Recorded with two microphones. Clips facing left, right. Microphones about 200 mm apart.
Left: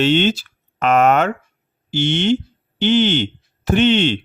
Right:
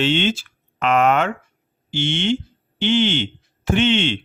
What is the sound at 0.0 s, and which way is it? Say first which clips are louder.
Speech: left 4 dB; 40° left (ahead or behind).